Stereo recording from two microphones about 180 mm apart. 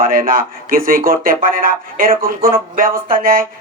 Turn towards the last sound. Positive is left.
turn(degrees=-50)  # may be behind; listen again after turning